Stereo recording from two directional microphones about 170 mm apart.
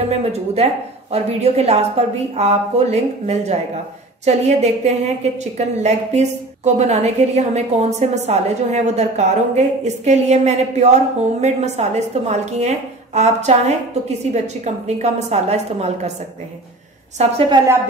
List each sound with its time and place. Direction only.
0.1 s a woman's voice: 40° right (ahead or behind)
17.2 s a woman's voice: 35° right (ahead or behind)